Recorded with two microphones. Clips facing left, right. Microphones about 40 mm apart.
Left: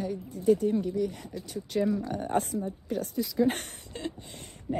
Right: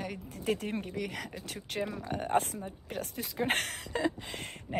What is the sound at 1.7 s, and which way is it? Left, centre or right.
Speech, right.